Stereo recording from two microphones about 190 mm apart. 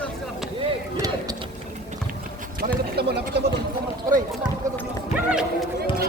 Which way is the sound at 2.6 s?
55° right (ahead or behind).